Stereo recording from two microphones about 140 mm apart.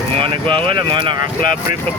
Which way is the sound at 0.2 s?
40° right (ahead or behind).